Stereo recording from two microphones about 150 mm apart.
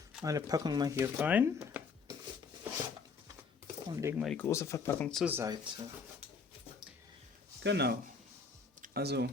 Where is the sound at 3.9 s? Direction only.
20° right (ahead or behind).